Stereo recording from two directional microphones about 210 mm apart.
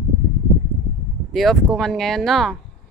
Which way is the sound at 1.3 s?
Centre (ahead or behind).